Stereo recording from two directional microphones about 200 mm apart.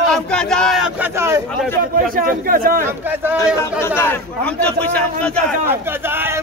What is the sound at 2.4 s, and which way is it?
Speech, 45° right (ahead or behind).